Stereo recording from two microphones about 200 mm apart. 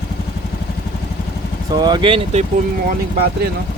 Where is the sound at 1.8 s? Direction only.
20° right (ahead or behind).